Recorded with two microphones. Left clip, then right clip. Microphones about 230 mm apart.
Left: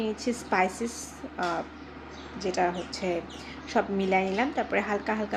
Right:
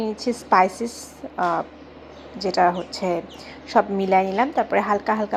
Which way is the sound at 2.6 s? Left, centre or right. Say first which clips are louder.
Right 9 dB; centre.